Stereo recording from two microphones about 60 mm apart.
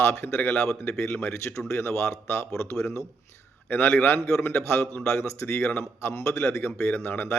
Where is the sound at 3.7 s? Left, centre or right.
Left.